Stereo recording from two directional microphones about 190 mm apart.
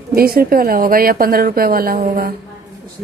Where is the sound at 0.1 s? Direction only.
50° right (ahead or behind).